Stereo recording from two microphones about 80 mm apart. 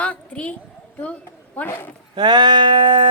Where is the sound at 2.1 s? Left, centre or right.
Right.